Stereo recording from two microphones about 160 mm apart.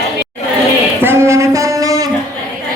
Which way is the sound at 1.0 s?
15° right (ahead or behind).